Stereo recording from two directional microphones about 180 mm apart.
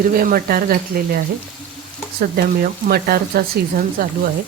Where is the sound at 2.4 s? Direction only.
55° right (ahead or behind).